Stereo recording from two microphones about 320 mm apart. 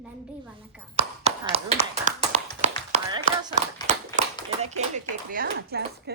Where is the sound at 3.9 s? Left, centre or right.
Right.